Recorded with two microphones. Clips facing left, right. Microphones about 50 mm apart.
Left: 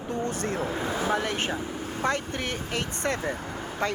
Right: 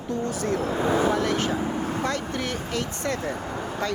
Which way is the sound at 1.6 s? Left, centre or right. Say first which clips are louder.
Right 7 dB; right.